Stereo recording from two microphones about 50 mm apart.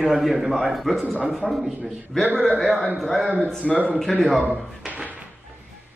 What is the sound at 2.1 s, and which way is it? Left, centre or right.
Speech, centre.